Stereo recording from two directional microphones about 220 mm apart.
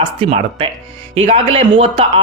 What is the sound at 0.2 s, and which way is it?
A man's voice, 25° right (ahead or behind).